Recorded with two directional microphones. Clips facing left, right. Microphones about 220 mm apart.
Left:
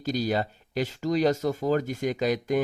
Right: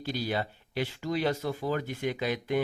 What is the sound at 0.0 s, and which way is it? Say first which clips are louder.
Speech: left 5 dB; 45° left (ahead or behind).